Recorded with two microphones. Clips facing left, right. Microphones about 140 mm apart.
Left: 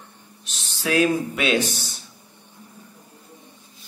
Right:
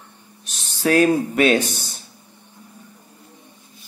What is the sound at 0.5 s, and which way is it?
Speech, 50° right (ahead or behind).